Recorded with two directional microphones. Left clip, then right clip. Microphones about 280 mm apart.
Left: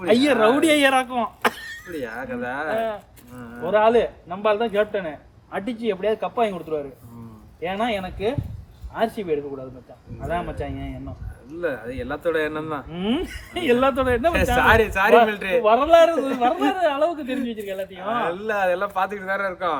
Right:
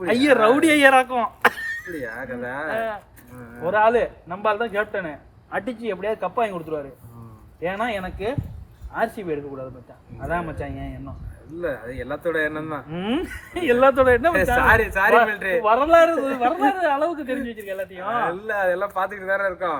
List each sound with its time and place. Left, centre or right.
0.0 s speech: centre